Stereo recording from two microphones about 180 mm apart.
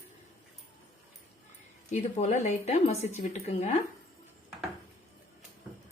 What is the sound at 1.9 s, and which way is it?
A woman's voice, 40° left (ahead or behind).